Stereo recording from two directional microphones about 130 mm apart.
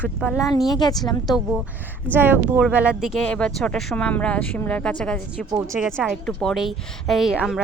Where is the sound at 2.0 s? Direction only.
15° right (ahead or behind).